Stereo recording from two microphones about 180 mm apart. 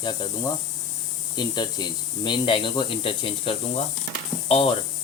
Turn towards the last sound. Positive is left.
turn(degrees=30)  # may be behind; listen again after turning